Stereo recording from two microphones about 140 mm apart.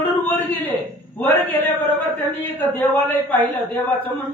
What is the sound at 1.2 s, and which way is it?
Speech, 15° left (ahead or behind).